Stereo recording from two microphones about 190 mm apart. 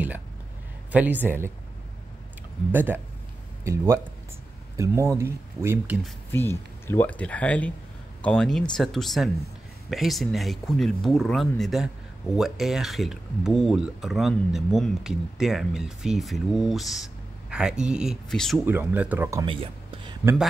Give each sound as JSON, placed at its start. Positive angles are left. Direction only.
{"t": 0.9, "sound": "speech", "side_deg": -10}
{"t": 2.7, "sound": "speech", "side_deg": -10}
{"t": 6.3, "sound": "speech", "side_deg": 10}
{"t": 18.7, "sound": "speech", "side_deg": -10}
{"t": 19.4, "sound": "speech", "side_deg": -30}
{"t": 20.2, "sound": "speech", "side_deg": -5}